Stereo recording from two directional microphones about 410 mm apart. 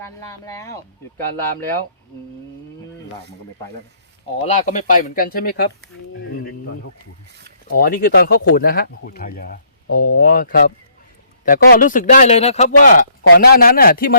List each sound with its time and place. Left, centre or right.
0.0 s speech: centre
4.4 s a man's voice: centre
7.7 s a man's voice: left